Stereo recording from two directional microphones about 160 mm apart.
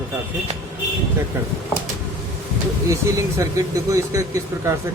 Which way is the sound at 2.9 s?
20° right (ahead or behind).